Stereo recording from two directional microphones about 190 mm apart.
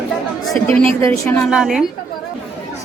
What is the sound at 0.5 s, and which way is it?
Speech, 10° left (ahead or behind).